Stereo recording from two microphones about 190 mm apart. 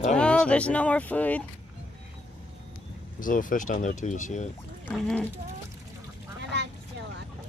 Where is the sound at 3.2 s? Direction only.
45° left (ahead or behind).